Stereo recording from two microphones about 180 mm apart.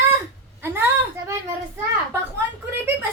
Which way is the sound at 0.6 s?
10° right (ahead or behind).